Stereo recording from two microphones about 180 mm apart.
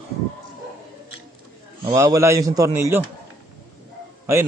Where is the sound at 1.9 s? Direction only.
20° right (ahead or behind).